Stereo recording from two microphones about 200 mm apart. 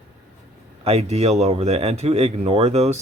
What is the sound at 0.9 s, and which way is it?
Speech, 30° right (ahead or behind).